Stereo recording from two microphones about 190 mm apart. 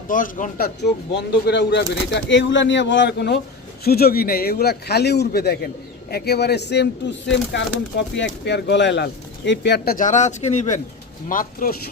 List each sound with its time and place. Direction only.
0.1 s speech: 45° left (ahead or behind)
0.8 s a man's voice: 65° left (ahead or behind); by 10.8 s 35° left (ahead or behind)
11.3 s speech: 50° left (ahead or behind)